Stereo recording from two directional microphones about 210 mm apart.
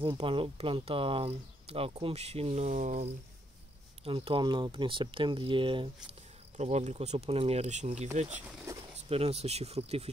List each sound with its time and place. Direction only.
0.2 s speech: 25° right (ahead or behind)
8.4 s speech: 15° right (ahead or behind)
9.1 s speech: 30° right (ahead or behind)